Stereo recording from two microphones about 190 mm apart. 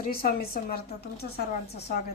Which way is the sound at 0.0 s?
50° left (ahead or behind).